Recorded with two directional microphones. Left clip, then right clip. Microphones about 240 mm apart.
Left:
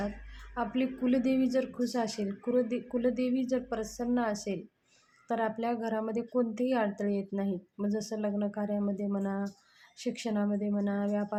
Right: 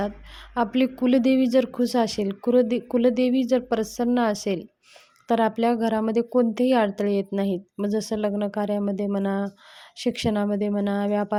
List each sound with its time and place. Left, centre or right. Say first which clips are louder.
0.5 s speech: right 9 dB; right